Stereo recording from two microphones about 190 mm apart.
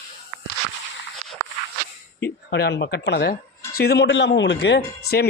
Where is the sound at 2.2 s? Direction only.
60° left (ahead or behind).